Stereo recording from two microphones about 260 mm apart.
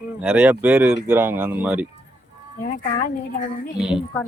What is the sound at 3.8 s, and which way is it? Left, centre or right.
Speech, centre.